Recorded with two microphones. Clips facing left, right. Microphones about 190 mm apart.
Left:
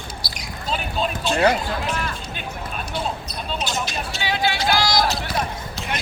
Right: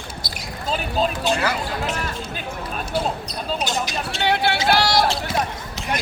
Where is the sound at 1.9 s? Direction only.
40° right (ahead or behind).